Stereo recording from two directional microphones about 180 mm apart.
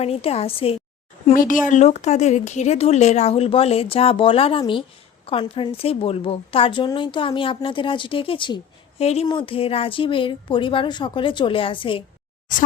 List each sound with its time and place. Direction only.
0.0 s speech: 35° left (ahead or behind)
1.3 s a woman's voice: 50° left (ahead or behind); by 12.0 s 30° left (ahead or behind)